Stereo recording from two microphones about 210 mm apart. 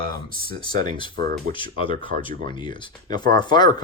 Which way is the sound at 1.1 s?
45° right (ahead or behind).